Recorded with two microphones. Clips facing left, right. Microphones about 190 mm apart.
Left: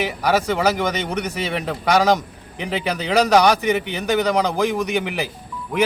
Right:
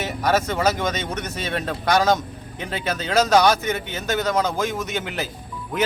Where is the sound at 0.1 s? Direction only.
15° left (ahead or behind).